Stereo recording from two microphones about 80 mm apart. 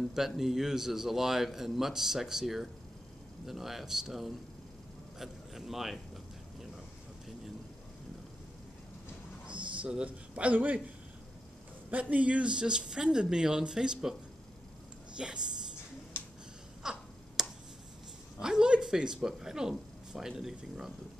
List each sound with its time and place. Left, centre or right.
0.1 s a man's voice: centre
9.8 s a man's voice: centre
11.9 s speech: centre
15.1 s speech: centre
16.1 s finger snapping: left
16.8 s finger snapping: centre
18.4 s a man's voice: centre